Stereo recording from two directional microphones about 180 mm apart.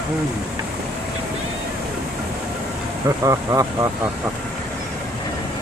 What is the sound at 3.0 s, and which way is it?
Speech, 20° right (ahead or behind).